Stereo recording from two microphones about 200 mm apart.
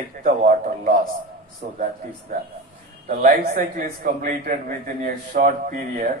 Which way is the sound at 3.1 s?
40° right (ahead or behind).